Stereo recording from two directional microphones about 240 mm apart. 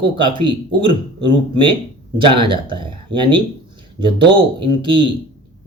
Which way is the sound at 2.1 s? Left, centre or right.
Right.